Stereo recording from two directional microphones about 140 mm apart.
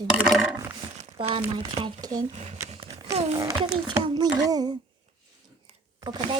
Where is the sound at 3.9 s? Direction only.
30° right (ahead or behind).